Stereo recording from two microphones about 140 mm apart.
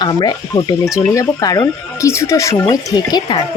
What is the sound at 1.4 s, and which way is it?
Speech, 25° left (ahead or behind).